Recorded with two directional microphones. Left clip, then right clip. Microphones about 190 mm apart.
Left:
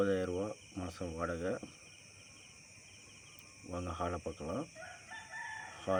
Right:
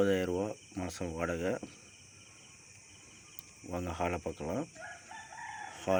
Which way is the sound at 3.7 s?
15° right (ahead or behind).